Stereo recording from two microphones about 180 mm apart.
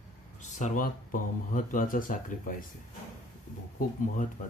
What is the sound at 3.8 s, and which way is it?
Speech, 45° left (ahead or behind).